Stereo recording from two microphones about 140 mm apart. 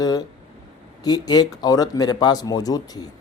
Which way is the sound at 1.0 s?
30° left (ahead or behind).